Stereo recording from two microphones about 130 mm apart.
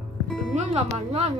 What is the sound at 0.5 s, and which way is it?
Music, 55° right (ahead or behind).